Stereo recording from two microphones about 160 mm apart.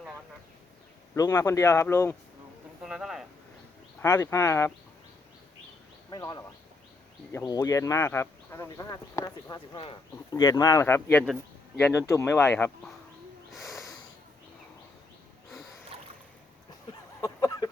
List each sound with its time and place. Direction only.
1.1 s speech: 20° left (ahead or behind)
2.8 s speech: 5° right (ahead or behind)
4.0 s speech: 20° left (ahead or behind)
6.1 s speech: 25° left (ahead or behind)
13.5 s a sound: centre (ahead or behind)
17.2 s a sound: 20° left (ahead or behind)